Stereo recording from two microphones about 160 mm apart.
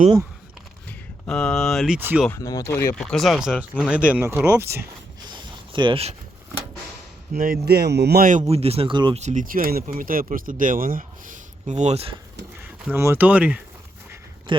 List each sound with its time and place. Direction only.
0.9 s speech: 5° left (ahead or behind)
2.0 s speech: 10° right (ahead or behind)
2.3 s speech: 20° left (ahead or behind)
2.9 s speech: centre (ahead or behind)
5.3 s zipper: 30° right (ahead or behind)
7.3 s speech: 70° right (ahead or behind); by 8.3 s 85° right
8.3 s speech: 45° right (ahead or behind); by 9.1 s 30° right (ahead or behind)
9.1 s speech: 50° right (ahead or behind)
12.9 s speech: 15° right (ahead or behind)
14.5 s speech: 30° right (ahead or behind)